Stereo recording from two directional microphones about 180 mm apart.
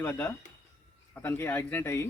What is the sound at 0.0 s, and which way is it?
Speech, 10° left (ahead or behind).